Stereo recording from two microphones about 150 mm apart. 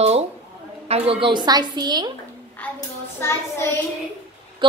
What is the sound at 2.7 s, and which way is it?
Hands, 20° left (ahead or behind).